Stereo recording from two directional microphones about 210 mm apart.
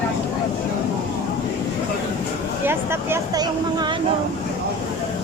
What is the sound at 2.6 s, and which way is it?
Speech, 10° right (ahead or behind).